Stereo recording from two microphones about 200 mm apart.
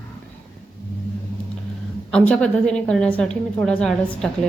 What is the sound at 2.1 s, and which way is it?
A woman's voice, 5° left (ahead or behind).